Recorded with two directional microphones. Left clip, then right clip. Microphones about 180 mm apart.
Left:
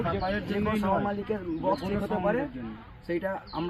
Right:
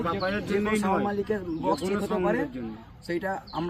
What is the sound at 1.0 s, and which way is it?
Speech, 20° right (ahead or behind).